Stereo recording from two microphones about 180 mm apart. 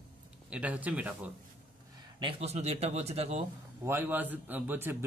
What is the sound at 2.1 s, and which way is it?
A man's voice, 30° right (ahead or behind).